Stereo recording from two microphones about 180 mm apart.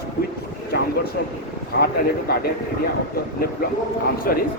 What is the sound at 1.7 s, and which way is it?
Speech, 65° left (ahead or behind).